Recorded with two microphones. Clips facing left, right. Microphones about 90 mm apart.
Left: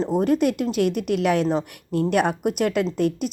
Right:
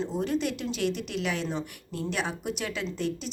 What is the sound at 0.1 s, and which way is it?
Speech, 50° left (ahead or behind).